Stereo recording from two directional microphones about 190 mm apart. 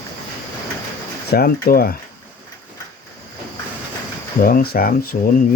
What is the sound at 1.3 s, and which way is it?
Speech, 50° left (ahead or behind).